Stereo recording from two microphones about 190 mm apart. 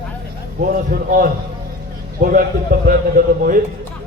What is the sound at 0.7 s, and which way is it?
A man's voice, 50° right (ahead or behind).